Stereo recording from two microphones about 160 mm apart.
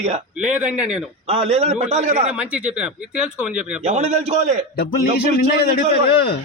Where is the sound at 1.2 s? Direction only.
40° right (ahead or behind).